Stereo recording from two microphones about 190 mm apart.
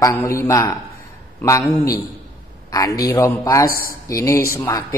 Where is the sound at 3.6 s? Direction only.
50° left (ahead or behind).